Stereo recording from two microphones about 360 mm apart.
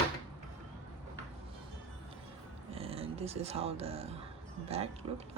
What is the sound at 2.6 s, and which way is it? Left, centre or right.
Speech, centre.